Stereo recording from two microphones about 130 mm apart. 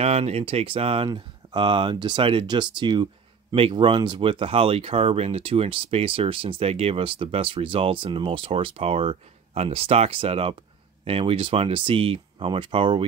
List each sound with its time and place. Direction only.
0.0 s speech: 55° right (ahead or behind)